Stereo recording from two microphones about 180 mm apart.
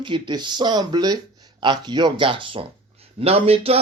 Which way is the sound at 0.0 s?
25° right (ahead or behind).